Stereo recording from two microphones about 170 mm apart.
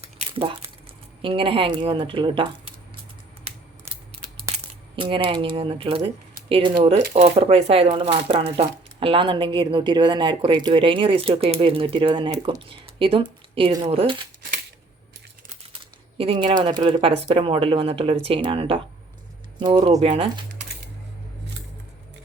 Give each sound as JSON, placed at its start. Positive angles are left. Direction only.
{"t": 0.2, "sound": "a sound", "side_deg": -30}
{"t": 1.2, "sound": "speech", "side_deg": -30}
{"t": 4.9, "sound": "speech", "side_deg": -30}
{"t": 15.7, "sound": "speech", "side_deg": -35}